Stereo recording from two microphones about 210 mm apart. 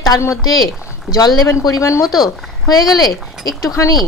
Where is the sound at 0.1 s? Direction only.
20° left (ahead or behind).